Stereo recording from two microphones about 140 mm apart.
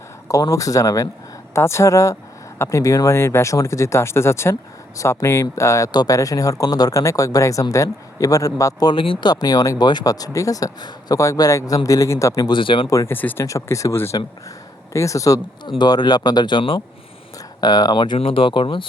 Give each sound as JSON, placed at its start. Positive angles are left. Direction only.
{"t": 0.3, "sound": "speech", "side_deg": 25}
{"t": 12.9, "sound": "speech", "side_deg": 20}